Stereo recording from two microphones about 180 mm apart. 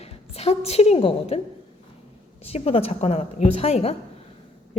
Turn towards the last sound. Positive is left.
turn(degrees=35)  # may be behind; listen again after turning